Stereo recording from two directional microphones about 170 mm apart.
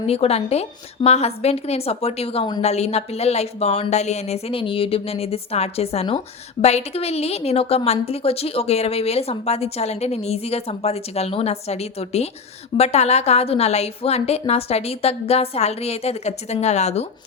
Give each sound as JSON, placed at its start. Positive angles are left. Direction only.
{"t": 0.1, "sound": "a woman's voice", "side_deg": 35}